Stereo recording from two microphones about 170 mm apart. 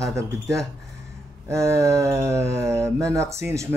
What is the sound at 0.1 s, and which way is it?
Speech, 15° right (ahead or behind).